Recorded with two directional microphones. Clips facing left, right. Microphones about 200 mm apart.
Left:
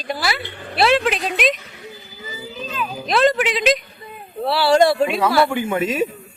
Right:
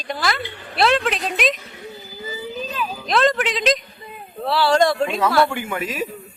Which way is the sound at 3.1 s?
5° left (ahead or behind).